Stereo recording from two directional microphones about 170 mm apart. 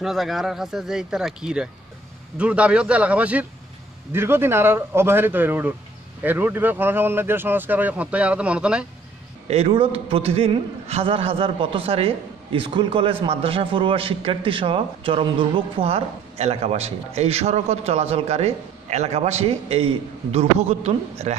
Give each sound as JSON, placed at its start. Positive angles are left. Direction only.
{"t": 0.0, "sound": "speech", "side_deg": 0}
{"t": 9.5, "sound": "a man's voice", "side_deg": -35}